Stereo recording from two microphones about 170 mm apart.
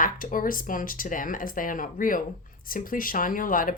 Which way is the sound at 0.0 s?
55° left (ahead or behind).